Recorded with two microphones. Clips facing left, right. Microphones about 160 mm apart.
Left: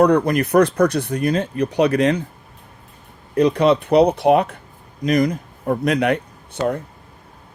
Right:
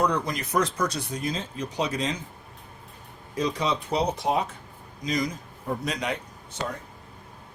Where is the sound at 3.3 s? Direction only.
65° left (ahead or behind).